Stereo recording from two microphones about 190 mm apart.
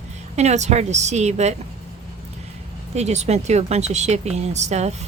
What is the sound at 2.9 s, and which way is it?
Speech, 35° right (ahead or behind).